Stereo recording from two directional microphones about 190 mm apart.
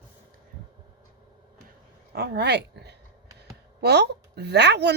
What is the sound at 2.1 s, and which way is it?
Speech, 60° right (ahead or behind).